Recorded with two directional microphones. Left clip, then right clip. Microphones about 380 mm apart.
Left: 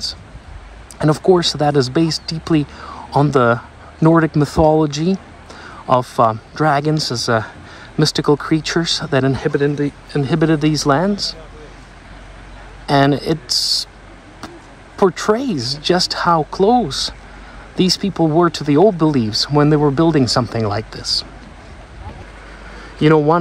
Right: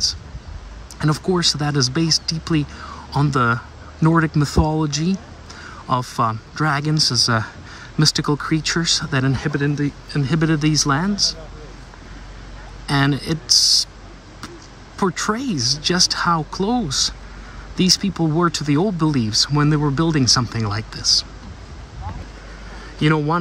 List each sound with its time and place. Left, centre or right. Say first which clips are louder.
0.9 s speech: left 8 dB; centre
12.8 s speech: left 6 dB; centre
15.1 s speech: left 5 dB; centre
22.9 s a man's voice: left 7 dB; centre